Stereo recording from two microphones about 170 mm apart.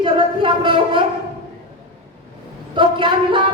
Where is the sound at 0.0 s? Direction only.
30° right (ahead or behind).